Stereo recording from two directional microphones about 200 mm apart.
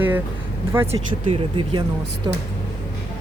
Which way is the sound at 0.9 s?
30° right (ahead or behind).